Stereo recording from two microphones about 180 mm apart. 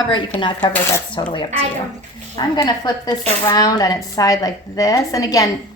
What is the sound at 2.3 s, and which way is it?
Speech, 20° left (ahead or behind).